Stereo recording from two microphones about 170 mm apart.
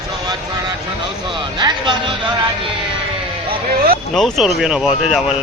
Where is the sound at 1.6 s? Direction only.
30° right (ahead or behind).